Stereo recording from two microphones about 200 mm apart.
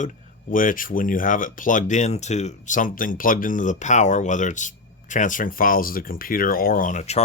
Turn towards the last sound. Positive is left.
turn(degrees=35)  # may be behind; listen again after turning